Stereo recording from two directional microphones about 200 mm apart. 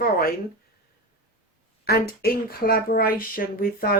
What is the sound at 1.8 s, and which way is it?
Speech, 50° left (ahead or behind).